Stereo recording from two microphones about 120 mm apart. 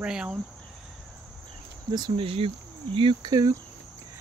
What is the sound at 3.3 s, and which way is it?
Cricket, 30° right (ahead or behind).